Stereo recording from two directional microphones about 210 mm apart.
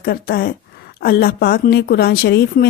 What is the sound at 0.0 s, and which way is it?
A woman's voice, 45° left (ahead or behind).